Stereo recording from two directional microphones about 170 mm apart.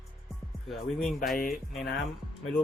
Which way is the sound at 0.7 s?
Centre (ahead or behind).